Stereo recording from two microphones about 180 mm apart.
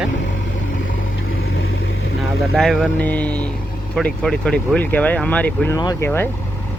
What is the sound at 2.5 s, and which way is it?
Speech, centre (ahead or behind).